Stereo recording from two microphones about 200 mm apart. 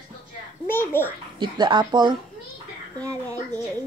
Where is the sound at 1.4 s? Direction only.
25° right (ahead or behind).